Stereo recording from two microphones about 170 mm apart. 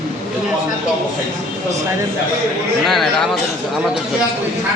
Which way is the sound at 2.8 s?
Centre (ahead or behind).